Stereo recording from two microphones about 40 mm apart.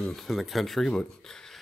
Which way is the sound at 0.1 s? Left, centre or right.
Centre.